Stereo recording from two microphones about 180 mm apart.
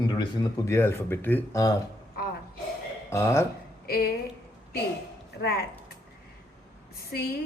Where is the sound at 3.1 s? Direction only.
15° left (ahead or behind).